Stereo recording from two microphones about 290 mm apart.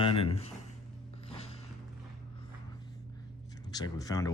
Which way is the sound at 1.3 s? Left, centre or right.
Centre.